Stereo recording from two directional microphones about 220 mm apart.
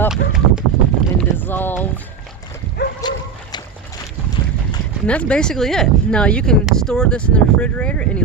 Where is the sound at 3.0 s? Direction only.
20° left (ahead or behind).